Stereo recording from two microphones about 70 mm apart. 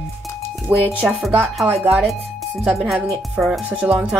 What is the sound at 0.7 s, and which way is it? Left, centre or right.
Speech, right.